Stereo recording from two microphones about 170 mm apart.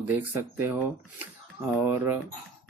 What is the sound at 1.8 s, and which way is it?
Speech, 10° right (ahead or behind).